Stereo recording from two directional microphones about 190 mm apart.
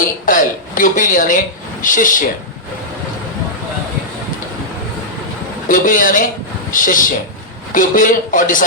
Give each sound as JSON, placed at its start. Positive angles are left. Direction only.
{"t": 0.3, "sound": "speech", "side_deg": 45}
{"t": 5.6, "sound": "speech", "side_deg": 45}